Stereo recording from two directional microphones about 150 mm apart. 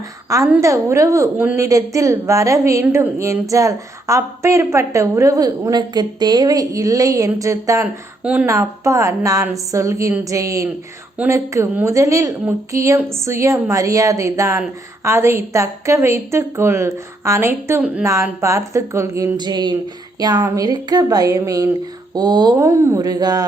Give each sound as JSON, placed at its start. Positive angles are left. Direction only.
{"t": 0.3, "sound": "a woman's voice", "side_deg": -20}
{"t": 8.2, "sound": "speech", "side_deg": -10}
{"t": 8.4, "sound": "a woman's voice", "side_deg": -20}